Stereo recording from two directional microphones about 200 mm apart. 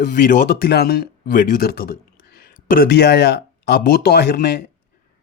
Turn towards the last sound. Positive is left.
turn(degrees=50)  # may be behind; listen again after turning